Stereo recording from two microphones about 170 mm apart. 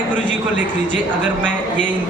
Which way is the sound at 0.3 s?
90° right.